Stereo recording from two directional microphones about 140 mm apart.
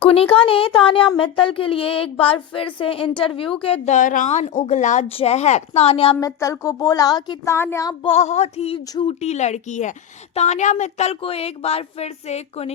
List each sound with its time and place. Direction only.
0.1 s a woman's voice: 40° left (ahead or behind)
3.8 s a woman's voice: 65° left (ahead or behind)
5.1 s speech: 50° left (ahead or behind)
6.1 s speech: 25° left (ahead or behind)
8.1 s speech: 55° left (ahead or behind)
8.9 s a woman's voice: 35° left (ahead or behind)
9.2 s a woman's voice: 55° left (ahead or behind)